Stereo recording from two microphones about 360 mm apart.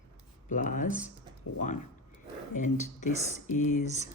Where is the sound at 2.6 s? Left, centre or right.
Left.